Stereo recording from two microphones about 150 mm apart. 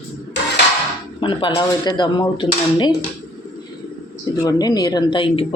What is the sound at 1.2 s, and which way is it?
Speech, 35° left (ahead or behind).